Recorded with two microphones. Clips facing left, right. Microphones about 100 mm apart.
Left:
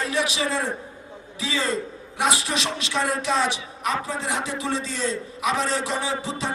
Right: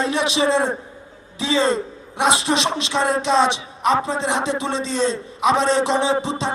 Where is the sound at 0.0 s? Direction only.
25° right (ahead or behind).